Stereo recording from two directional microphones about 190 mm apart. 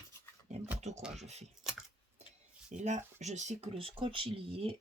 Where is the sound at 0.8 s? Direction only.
35° right (ahead or behind).